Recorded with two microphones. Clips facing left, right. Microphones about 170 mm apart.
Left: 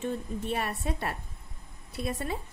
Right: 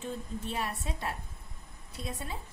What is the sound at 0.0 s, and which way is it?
A woman's voice, 65° left (ahead or behind).